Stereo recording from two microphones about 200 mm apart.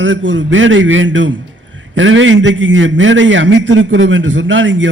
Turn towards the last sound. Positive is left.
turn(degrees=-70)  # may be behind; listen again after turning